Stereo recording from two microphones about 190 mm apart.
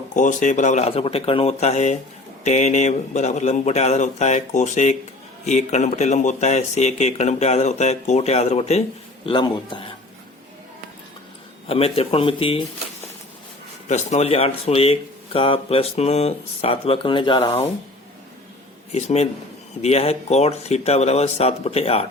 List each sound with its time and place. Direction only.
0.1 s speech: 40° left (ahead or behind); by 9.8 s 25° left (ahead or behind)
11.7 s speech: 30° left (ahead or behind)
13.8 s speech: 40° left (ahead or behind)
18.9 s speech: 35° left (ahead or behind)